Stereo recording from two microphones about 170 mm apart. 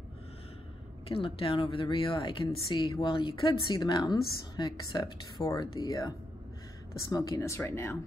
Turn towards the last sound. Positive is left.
turn(degrees=15)  # may be behind; listen again after turning